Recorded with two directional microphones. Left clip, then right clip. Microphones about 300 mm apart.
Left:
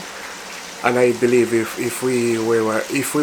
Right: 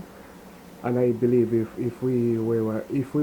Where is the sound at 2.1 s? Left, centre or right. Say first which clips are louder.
Left 5 dB; left.